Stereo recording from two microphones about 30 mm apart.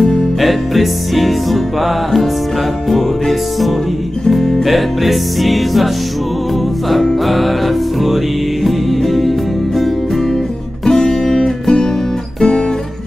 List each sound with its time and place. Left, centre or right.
0.4 s music: centre
2.9 s music: centre
7.2 s music: centre
10.9 s music: left